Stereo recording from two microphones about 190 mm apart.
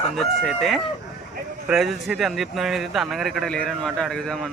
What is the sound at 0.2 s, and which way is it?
Speech, centre (ahead or behind).